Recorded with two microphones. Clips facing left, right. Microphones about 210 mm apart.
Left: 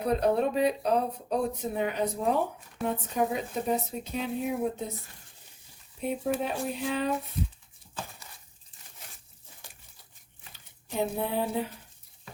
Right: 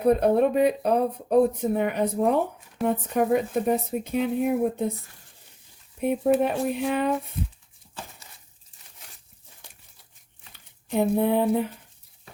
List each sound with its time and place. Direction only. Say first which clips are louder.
0.0 s speech: right 6 dB; 55° right (ahead or behind)
6.0 s speech: right 8 dB; 60° right (ahead or behind)
11.2 s speech: right 8 dB; 60° right (ahead or behind)